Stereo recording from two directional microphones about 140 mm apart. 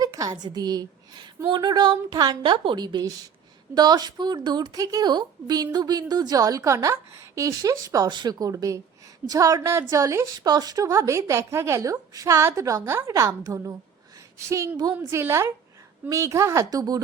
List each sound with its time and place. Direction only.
0.0 s a woman's voice: 25° right (ahead or behind)